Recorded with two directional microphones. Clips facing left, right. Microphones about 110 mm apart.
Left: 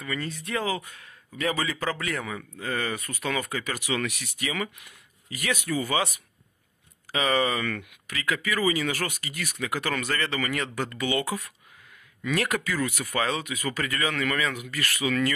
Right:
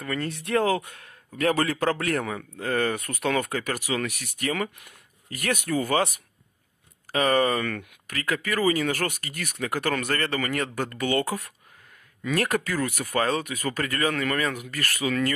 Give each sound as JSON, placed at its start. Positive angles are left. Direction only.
{"t": 0.0, "sound": "a man's voice", "side_deg": -55}